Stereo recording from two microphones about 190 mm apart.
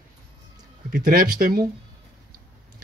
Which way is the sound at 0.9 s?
50° right (ahead or behind).